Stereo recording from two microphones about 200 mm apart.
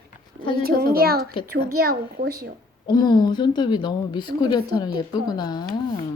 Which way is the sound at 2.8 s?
20° left (ahead or behind).